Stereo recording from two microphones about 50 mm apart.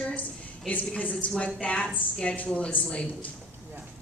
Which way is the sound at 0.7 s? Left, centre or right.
Left.